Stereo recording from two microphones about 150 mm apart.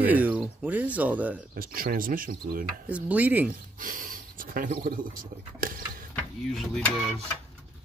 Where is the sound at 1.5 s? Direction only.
75° right (ahead or behind).